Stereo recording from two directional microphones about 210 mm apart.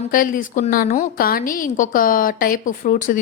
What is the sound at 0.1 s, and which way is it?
A woman's voice, 40° left (ahead or behind).